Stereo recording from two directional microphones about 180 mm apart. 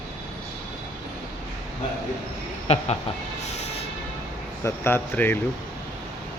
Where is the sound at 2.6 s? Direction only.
35° left (ahead or behind).